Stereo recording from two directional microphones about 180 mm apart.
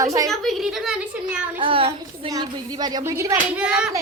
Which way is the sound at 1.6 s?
30° right (ahead or behind).